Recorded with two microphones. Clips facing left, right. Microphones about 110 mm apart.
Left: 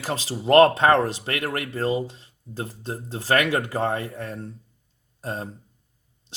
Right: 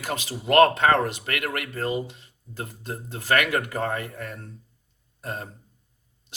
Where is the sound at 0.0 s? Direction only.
30° left (ahead or behind).